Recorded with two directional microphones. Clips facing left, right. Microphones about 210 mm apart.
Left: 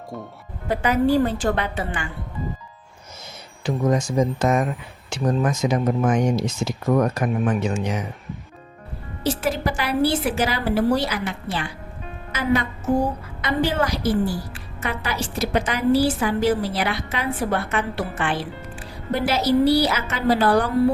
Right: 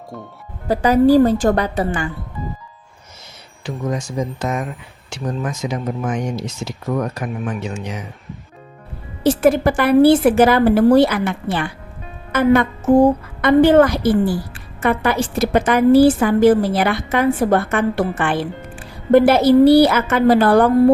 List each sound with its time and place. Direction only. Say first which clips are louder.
0.7 s a woman's voice: right 7 dB; 35° right (ahead or behind)
3.9 s speech: left 3 dB; 45° left (ahead or behind)
9.2 s a woman's voice: right 9 dB; 55° right (ahead or behind)